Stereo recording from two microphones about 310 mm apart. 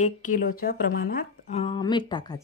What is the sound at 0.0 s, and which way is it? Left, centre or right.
Speech, left.